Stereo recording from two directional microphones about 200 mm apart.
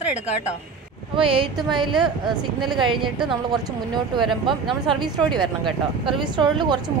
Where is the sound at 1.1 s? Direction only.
25° right (ahead or behind).